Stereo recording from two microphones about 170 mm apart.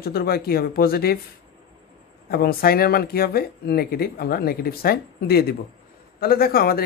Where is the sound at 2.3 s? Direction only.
65° left (ahead or behind).